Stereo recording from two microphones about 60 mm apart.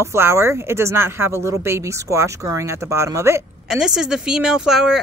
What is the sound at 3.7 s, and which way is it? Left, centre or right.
Speech, centre.